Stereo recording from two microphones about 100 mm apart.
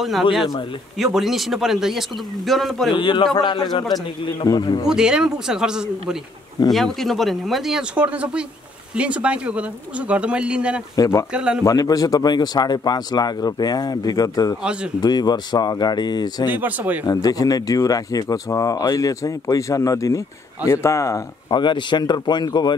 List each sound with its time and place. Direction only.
0.9 s a man's voice: centre (ahead or behind)
2.9 s speech: 55° left (ahead or behind)
4.8 s a man's voice: 5° right (ahead or behind)
11.6 s speech: 35° left (ahead or behind)
14.6 s speech: 10° right (ahead or behind)
15.0 s speech: 45° left (ahead or behind)
16.5 s speech: 15° right (ahead or behind)
17.0 s speech: 40° left (ahead or behind)
21.5 s speech: 50° left (ahead or behind)